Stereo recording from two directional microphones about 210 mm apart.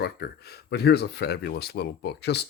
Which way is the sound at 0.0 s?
50° left (ahead or behind).